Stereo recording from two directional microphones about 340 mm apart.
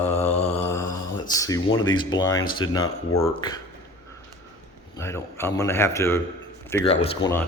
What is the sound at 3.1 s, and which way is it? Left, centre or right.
Speech, left.